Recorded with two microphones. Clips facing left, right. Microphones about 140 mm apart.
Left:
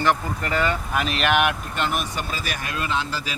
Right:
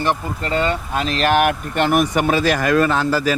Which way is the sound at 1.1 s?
35° right (ahead or behind).